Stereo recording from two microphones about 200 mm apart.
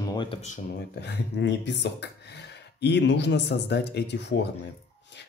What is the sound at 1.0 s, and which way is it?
Speech, 60° left (ahead or behind).